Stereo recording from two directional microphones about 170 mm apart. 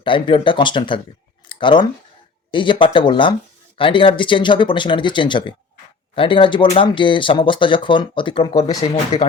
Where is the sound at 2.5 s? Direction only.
30° left (ahead or behind).